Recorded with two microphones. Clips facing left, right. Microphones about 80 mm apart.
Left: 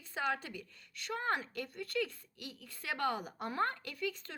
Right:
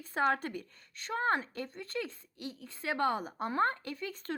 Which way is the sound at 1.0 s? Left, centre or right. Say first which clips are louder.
Right 4 dB; right.